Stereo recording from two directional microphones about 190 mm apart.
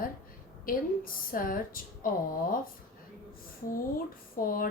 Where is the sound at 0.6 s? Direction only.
50° left (ahead or behind).